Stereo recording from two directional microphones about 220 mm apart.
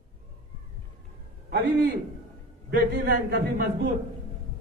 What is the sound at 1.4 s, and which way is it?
A man's voice, 50° right (ahead or behind).